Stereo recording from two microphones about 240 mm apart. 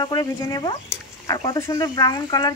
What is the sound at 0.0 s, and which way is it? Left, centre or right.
Speech, centre.